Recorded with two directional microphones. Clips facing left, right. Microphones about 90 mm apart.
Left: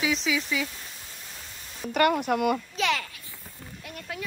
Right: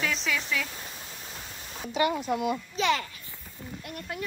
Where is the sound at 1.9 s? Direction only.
65° left (ahead or behind).